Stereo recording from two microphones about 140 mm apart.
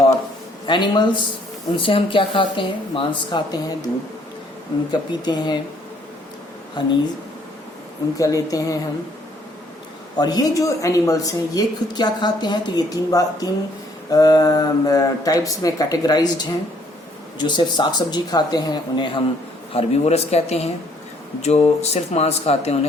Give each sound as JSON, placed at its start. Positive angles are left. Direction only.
{"t": 0.7, "sound": "speech", "side_deg": 35}
{"t": 4.9, "sound": "speech", "side_deg": 30}
{"t": 6.8, "sound": "speech", "side_deg": 30}
{"t": 8.2, "sound": "speech", "side_deg": 25}
{"t": 10.2, "sound": "speech", "side_deg": 30}
{"t": 17.3, "sound": "speech", "side_deg": 30}
{"t": 19.7, "sound": "speech", "side_deg": 50}